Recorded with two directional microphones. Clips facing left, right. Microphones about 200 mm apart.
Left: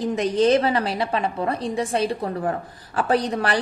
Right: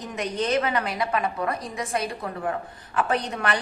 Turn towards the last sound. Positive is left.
turn(degrees=35)  # may be behind; listen again after turning